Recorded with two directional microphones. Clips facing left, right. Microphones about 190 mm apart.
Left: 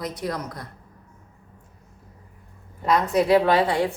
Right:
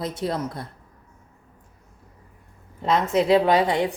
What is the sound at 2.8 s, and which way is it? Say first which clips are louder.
Speech: even; 25° right (ahead or behind).